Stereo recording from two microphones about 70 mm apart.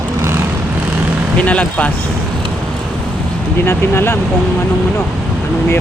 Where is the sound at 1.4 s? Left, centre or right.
Centre.